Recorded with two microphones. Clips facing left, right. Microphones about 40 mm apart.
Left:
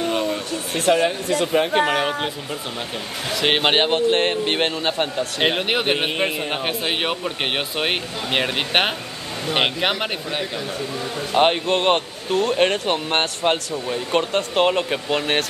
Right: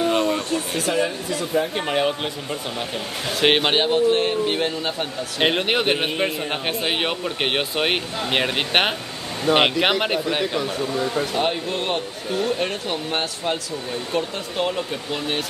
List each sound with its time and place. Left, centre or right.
0.0 s a sound: centre
0.7 s speech: left
3.6 s speech: left
3.9 s speech: left
5.4 s speech: centre
9.5 s speech: centre
11.3 s speech: left